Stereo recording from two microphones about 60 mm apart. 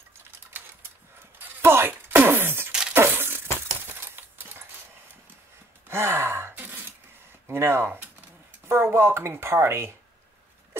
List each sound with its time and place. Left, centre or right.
1.4 s a sound: right
2.9 s crushing: right
3.9 s a sound: right
5.9 s sigh: right
6.5 s throat clearing: right
7.4 s speech: right